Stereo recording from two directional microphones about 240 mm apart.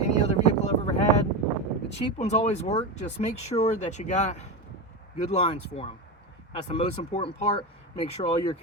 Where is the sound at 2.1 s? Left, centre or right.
Left.